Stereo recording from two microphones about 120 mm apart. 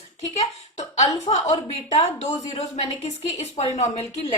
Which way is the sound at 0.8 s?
75° left (ahead or behind).